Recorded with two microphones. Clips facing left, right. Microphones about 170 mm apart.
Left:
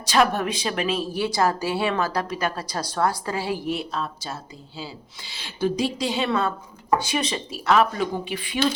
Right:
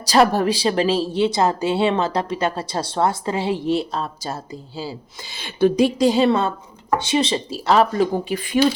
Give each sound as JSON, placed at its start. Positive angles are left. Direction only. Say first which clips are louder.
{"t": 0.0, "sound": "a woman's voice", "louder": "right 5 dB", "side_deg": -35}
{"t": 6.1, "sound": "speech", "louder": "right 7 dB", "side_deg": -35}